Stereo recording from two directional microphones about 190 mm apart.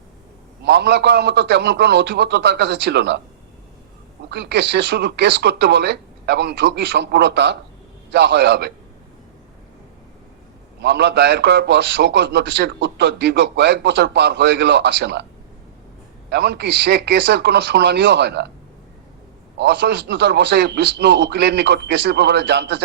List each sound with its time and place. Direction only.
0.6 s a man's voice: 60° right (ahead or behind)
4.3 s a man's voice: 60° right (ahead or behind)
10.8 s a man's voice: 60° right (ahead or behind)
16.3 s a man's voice: 60° right (ahead or behind)
19.5 s a man's voice: 65° right (ahead or behind)